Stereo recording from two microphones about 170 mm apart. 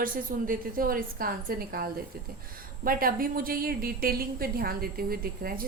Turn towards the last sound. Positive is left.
turn(degrees=-60)  # may be behind; listen again after turning